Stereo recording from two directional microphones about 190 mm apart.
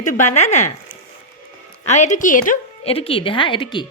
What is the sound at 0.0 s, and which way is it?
Speech, 40° left (ahead or behind).